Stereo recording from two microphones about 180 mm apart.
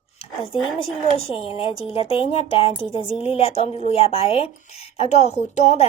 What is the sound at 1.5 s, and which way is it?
A woman's voice, 30° left (ahead or behind).